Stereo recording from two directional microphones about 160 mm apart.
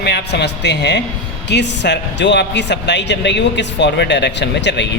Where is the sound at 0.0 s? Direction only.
90° left.